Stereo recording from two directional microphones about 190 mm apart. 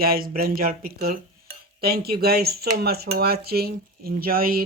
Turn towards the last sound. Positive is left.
turn(degrees=-50)  # may be behind; listen again after turning